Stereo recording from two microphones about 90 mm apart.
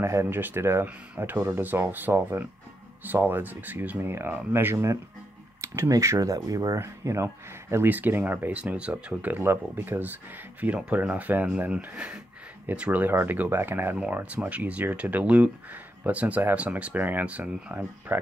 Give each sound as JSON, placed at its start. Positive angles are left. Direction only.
{"t": 0.0, "sound": "speech", "side_deg": -30}
{"t": 7.7, "sound": "speech", "side_deg": -20}
{"t": 13.9, "sound": "speech", "side_deg": -15}